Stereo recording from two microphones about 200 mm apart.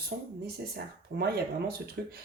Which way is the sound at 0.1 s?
45° right (ahead or behind).